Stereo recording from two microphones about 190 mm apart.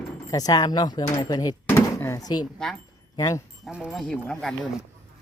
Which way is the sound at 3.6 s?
Centre (ahead or behind).